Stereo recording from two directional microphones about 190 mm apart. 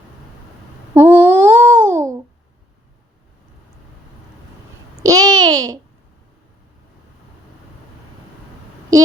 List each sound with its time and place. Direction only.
0.9 s a sound: 10° right (ahead or behind)
5.0 s babbling: 20° right (ahead or behind)
8.9 s speech: 15° right (ahead or behind)